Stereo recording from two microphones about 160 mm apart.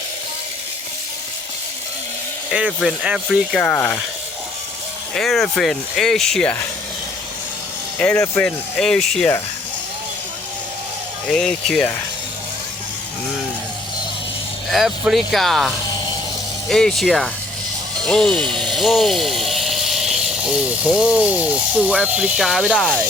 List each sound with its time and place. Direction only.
2.5 s speech: 5° right (ahead or behind)
3.6 s speech: 5° left (ahead or behind)
5.1 s speech: centre (ahead or behind)
7.9 s speech: 10° left (ahead or behind)
11.3 s speech: 5° left (ahead or behind)
14.7 s speech: centre (ahead or behind)